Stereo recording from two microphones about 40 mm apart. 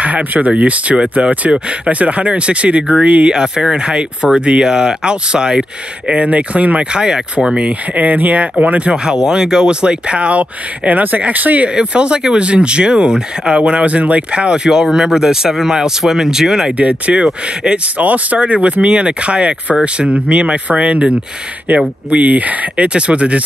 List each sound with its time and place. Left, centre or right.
0.0 s speech: right
3.3 s speech: centre; by 6.9 s right
6.9 s speech: right
7.9 s speech: right
8.9 s speech: centre; by 11.6 s right
11.7 s speech: right
16.7 s speech: right
22.9 s speech: right